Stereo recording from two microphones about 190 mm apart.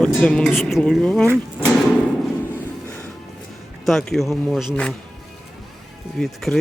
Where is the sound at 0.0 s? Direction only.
5° left (ahead or behind).